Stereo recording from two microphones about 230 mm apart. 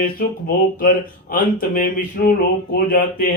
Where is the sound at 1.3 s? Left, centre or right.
Left.